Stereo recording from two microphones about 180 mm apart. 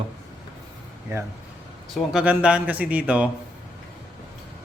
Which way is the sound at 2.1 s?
5° right (ahead or behind).